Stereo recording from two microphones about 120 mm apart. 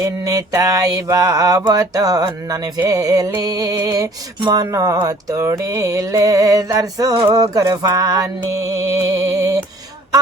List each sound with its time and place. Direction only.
0.0 s mantra: 30° right (ahead or behind)
2.8 s a sound: 30° right (ahead or behind)
5.0 s mantra: 25° right (ahead or behind)